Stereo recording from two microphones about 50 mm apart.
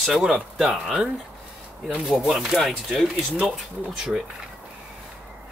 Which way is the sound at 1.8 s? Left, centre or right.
Centre.